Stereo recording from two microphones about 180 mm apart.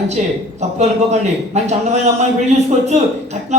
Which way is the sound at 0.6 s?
40° right (ahead or behind).